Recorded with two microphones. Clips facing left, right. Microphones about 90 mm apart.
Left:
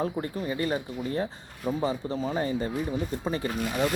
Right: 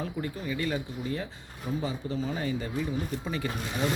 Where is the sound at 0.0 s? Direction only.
35° left (ahead or behind).